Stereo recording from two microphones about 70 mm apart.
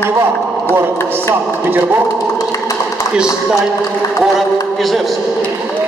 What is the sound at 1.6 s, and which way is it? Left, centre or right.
Speech, right.